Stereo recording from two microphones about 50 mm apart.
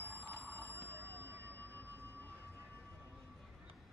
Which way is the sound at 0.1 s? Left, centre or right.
Left.